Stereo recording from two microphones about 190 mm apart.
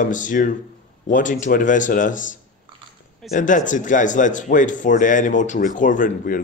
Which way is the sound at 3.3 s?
40° left (ahead or behind).